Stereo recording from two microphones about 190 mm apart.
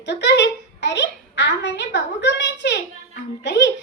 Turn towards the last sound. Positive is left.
turn(degrees=70)  # may be behind; listen again after turning